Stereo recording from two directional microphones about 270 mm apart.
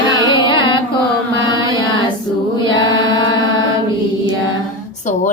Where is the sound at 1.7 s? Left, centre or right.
Centre.